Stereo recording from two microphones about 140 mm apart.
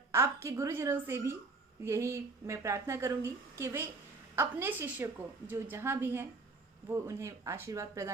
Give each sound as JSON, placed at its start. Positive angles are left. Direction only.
{"t": 0.1, "sound": "a woman's voice", "side_deg": -20}